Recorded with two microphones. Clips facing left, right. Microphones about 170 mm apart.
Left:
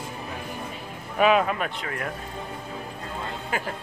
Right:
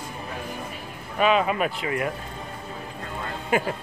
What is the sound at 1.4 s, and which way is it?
Speech, 10° right (ahead or behind).